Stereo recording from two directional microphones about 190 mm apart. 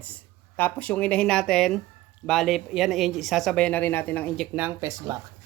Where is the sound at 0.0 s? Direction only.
10° left (ahead or behind).